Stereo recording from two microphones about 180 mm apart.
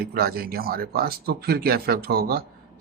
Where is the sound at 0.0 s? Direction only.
55° right (ahead or behind).